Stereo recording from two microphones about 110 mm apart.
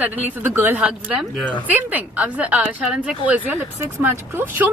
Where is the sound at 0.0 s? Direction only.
20° right (ahead or behind).